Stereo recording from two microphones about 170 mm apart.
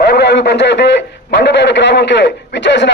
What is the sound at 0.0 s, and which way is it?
A man's voice, 75° left (ahead or behind).